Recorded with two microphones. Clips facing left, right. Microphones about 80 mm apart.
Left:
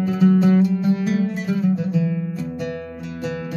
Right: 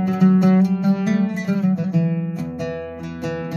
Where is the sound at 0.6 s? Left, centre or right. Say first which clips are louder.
Right 1 dB; right.